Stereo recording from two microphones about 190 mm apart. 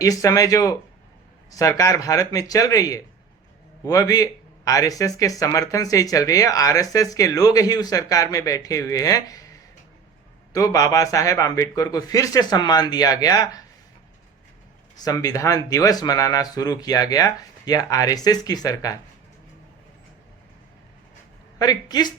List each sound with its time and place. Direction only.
0.0 s speech: 15° left (ahead or behind)
15.0 s speech: 20° left (ahead or behind)
21.6 s speech: 20° left (ahead or behind)